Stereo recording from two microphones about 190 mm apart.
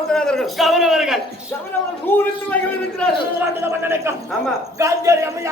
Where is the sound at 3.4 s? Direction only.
10° right (ahead or behind).